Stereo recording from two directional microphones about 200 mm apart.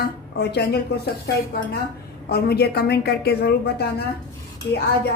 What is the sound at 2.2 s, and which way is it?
Speech, 55° left (ahead or behind).